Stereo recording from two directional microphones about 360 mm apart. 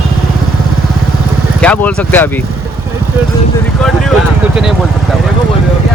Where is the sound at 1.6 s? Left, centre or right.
Centre.